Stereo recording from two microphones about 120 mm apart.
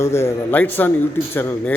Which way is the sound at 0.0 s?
20° left (ahead or behind).